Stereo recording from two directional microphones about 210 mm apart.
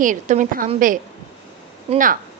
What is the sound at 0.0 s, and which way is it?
Speech, 40° right (ahead or behind).